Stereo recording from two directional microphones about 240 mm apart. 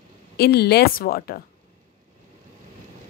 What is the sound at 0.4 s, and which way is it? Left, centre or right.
A woman's voice, left.